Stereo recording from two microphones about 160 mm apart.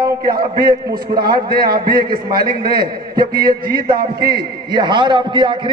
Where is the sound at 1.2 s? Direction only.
70° right (ahead or behind).